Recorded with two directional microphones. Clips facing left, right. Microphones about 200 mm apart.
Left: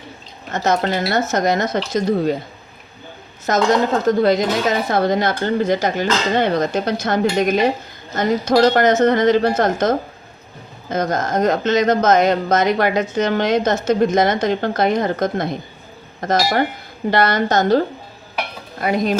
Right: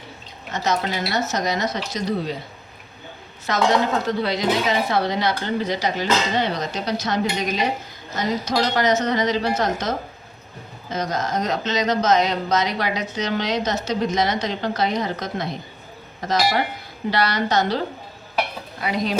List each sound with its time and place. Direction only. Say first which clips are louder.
0.5 s speech: left 5 dB; 50° left (ahead or behind)
3.5 s speech: left 4 dB; 45° left (ahead or behind)